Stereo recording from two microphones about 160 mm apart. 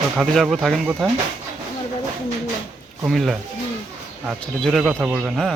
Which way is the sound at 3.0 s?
Centre (ahead or behind).